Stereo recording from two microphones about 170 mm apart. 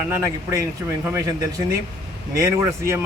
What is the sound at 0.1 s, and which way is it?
Speech, 15° right (ahead or behind).